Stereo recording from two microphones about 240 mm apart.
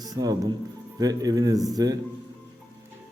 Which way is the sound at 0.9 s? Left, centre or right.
Centre.